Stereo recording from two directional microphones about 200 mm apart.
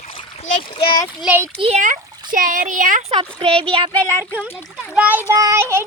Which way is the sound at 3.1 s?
25° right (ahead or behind).